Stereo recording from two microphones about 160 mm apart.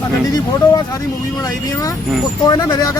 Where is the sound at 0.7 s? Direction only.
20° left (ahead or behind).